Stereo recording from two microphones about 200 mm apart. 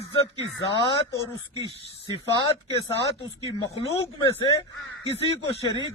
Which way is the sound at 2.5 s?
30° left (ahead or behind).